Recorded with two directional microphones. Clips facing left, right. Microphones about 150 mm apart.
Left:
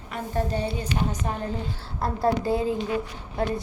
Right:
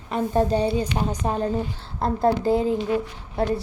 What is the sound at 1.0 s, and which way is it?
Speech, 45° right (ahead or behind).